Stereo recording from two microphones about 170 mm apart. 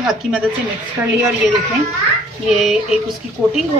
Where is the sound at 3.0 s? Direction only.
Centre (ahead or behind).